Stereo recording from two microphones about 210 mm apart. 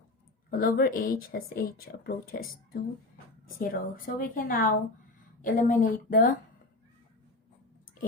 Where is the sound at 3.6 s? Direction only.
40° left (ahead or behind).